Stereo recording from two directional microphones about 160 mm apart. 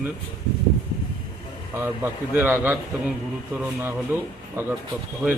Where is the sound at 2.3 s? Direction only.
10° right (ahead or behind).